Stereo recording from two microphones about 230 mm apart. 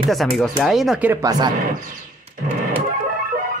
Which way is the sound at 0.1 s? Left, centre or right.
Centre.